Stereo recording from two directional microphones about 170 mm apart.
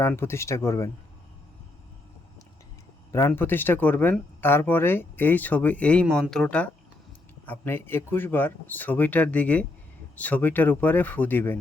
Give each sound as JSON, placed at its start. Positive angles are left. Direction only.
{"t": 0.0, "sound": "speech", "side_deg": 15}
{"t": 3.1, "sound": "speech", "side_deg": 15}